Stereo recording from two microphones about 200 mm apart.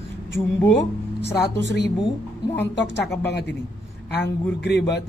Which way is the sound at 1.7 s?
60° left (ahead or behind).